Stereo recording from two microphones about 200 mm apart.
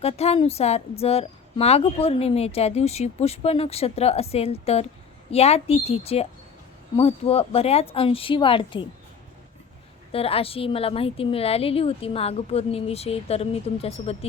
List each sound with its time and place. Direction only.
0.0 s a woman's voice: 30° left (ahead or behind)
10.1 s a woman's voice: 30° left (ahead or behind)